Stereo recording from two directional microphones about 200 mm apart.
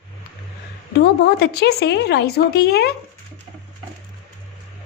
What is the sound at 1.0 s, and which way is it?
Speech, 55° left (ahead or behind).